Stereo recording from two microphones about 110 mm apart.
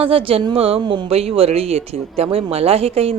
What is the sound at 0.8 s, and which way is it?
Speech, 45° right (ahead or behind).